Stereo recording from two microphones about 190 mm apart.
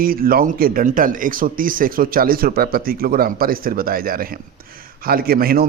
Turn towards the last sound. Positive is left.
turn(degrees=-50)  # may be behind; listen again after turning